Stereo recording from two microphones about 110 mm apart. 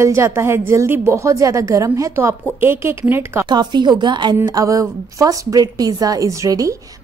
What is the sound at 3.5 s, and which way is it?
Speech, 40° right (ahead or behind).